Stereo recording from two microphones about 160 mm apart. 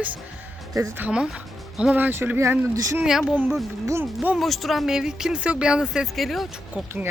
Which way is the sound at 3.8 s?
15° right (ahead or behind).